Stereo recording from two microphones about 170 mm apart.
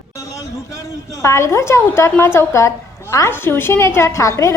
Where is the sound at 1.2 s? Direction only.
15° left (ahead or behind).